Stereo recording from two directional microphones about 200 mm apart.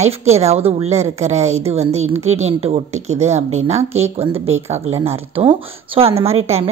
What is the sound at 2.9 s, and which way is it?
Speech, 90° right.